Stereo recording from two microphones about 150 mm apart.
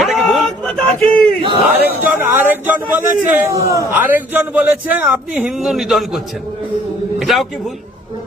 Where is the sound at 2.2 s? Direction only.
15° right (ahead or behind).